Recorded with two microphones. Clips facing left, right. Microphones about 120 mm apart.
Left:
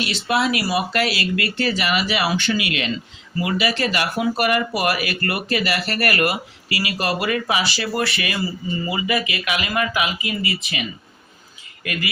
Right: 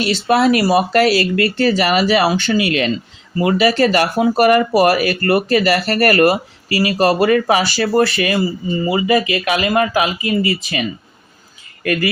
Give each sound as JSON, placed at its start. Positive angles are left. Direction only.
{"t": 0.0, "sound": "speech", "side_deg": -40}